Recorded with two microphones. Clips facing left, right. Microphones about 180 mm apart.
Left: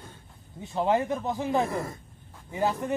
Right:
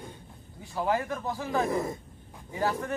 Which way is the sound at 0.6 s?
20° left (ahead or behind).